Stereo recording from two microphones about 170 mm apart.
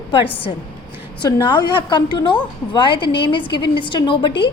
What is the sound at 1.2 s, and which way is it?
A woman's voice, 25° left (ahead or behind).